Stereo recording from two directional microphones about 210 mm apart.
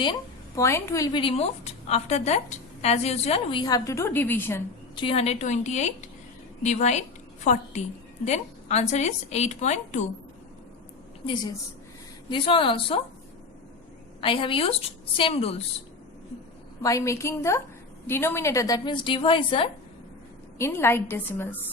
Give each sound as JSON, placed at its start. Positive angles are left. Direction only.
{"t": 0.0, "sound": "a woman's voice", "side_deg": 20}
{"t": 4.9, "sound": "a woman's voice", "side_deg": 25}
{"t": 12.3, "sound": "a woman's voice", "side_deg": 25}
{"t": 14.2, "sound": "a woman's voice", "side_deg": 25}
{"t": 16.8, "sound": "a woman's voice", "side_deg": 15}
{"t": 20.6, "sound": "a woman's voice", "side_deg": 10}